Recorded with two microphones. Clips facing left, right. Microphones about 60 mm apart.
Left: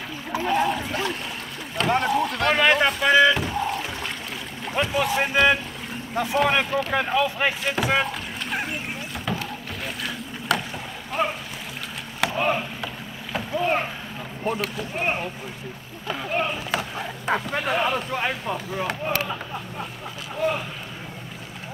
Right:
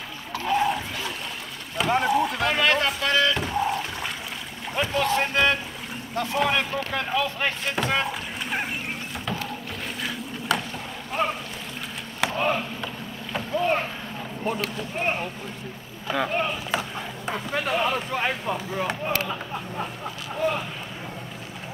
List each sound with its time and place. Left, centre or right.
0.3 s a sound: centre
1.8 s boat: centre
2.6 s speech: centre
3.0 s boat: centre
3.3 s rowboat: centre
4.7 s speech: centre
7.7 s a sound: centre
10.5 s boat: centre
12.3 s rowboat: centre
14.4 s speech: centre
16.3 s speech: centre